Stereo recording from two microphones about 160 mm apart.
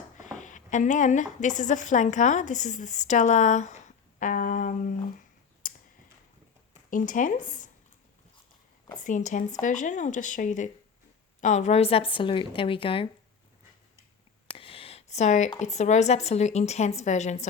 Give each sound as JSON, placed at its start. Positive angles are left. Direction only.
{"t": 0.3, "sound": "a woman's voice", "side_deg": 50}
{"t": 5.6, "sound": "clicking", "side_deg": 55}
{"t": 6.9, "sound": "speech", "side_deg": 55}
{"t": 9.0, "sound": "a woman's voice", "side_deg": 50}
{"t": 14.5, "sound": "a sound", "side_deg": 35}
{"t": 15.5, "sound": "speech", "side_deg": 45}